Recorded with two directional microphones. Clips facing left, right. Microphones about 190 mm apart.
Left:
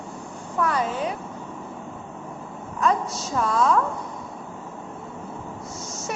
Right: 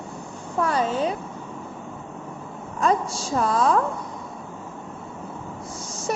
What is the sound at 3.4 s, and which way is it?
Speech, 35° right (ahead or behind).